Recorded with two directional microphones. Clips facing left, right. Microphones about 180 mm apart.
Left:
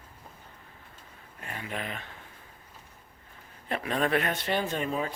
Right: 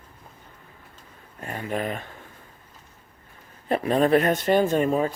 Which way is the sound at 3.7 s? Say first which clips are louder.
Right 8 dB; 35° right (ahead or behind).